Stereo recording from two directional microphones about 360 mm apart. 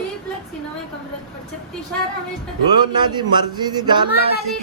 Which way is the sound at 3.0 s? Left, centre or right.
Centre.